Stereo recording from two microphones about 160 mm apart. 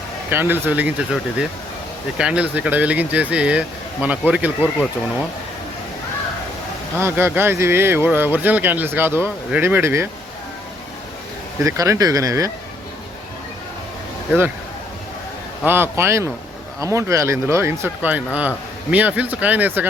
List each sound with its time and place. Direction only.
0.3 s speech: 10° right (ahead or behind)
7.0 s speech: 15° right (ahead or behind)
11.6 s speech: 20° right (ahead or behind)
15.6 s speech: 15° right (ahead or behind)